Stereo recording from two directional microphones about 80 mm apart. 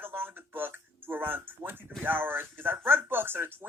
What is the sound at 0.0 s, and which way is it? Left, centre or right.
Music, right.